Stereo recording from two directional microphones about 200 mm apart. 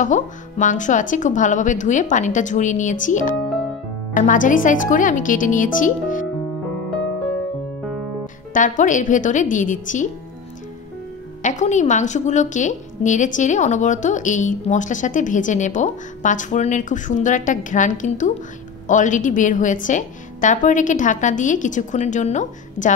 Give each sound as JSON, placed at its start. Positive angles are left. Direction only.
{"t": 0.0, "sound": "a woman's voice", "side_deg": 40}
{"t": 8.5, "sound": "a woman's voice", "side_deg": 40}
{"t": 11.4, "sound": "a woman's voice", "side_deg": 35}